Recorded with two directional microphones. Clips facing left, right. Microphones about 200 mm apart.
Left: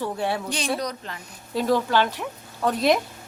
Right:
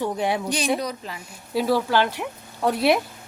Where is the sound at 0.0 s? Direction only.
15° right (ahead or behind).